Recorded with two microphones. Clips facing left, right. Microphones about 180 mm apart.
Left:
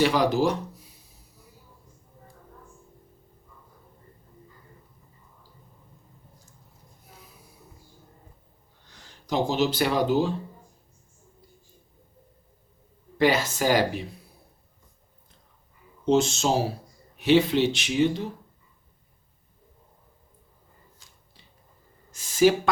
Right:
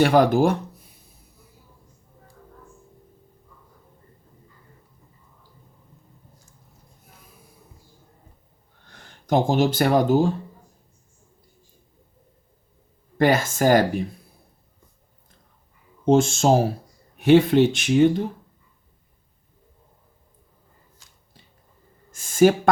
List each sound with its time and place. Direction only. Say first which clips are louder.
0.0 s speech: right 5 dB; 55° right (ahead or behind)
8.9 s speech: right 7 dB; 55° right (ahead or behind)
13.1 s speech: right 3 dB; 50° right (ahead or behind)
16.0 s speech: right 5 dB; 50° right (ahead or behind)
22.1 s a sound: right 3 dB; 50° right (ahead or behind)